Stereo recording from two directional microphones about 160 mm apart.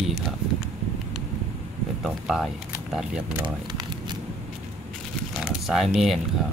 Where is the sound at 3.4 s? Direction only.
30° right (ahead or behind).